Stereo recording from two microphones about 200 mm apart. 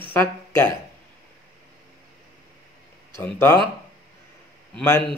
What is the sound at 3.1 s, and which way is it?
Speech, 10° left (ahead or behind).